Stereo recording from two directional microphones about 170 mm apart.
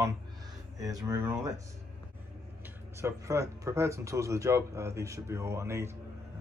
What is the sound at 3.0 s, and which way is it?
Speech, 15° right (ahead or behind).